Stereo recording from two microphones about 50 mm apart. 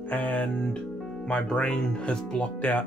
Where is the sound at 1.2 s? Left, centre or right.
Left.